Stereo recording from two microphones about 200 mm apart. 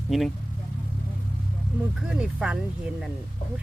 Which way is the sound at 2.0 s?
5° right (ahead or behind).